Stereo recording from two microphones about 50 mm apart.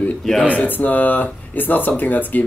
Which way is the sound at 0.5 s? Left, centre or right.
Left.